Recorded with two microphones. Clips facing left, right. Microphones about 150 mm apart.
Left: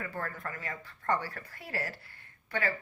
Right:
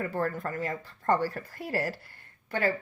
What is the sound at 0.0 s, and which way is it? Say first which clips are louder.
A woman's voice: right 8 dB; 35° right (ahead or behind).